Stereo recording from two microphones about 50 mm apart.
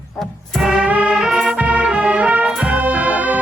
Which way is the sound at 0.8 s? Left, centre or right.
Right.